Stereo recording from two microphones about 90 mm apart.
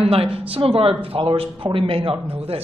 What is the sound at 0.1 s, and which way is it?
A woman's voice, 90° right.